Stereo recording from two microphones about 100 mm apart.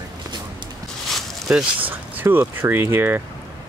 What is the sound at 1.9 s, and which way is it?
Speech, 20° right (ahead or behind).